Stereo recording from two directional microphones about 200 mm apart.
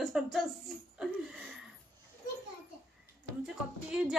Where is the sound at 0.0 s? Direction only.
Centre (ahead or behind).